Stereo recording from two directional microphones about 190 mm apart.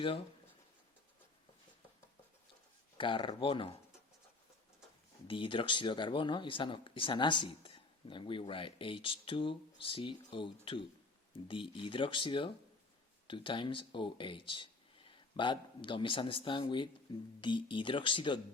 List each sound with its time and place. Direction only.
3.0 s speech: 25° left (ahead or behind)
5.3 s speech: 25° left (ahead or behind)